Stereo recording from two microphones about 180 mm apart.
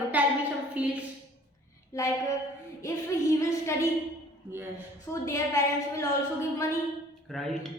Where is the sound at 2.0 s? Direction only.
15° left (ahead or behind).